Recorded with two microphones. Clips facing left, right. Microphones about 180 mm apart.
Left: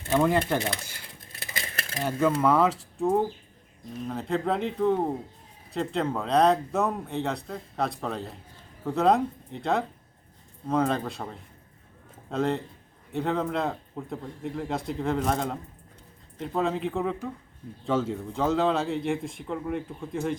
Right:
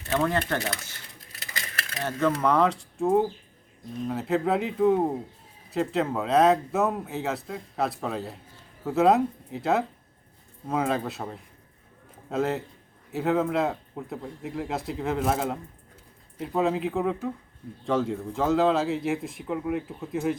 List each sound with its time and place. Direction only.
0.1 s speech: 10° left (ahead or behind)
1.5 s a sound: 25° left (ahead or behind)
2.0 s speech: 10° left (ahead or behind)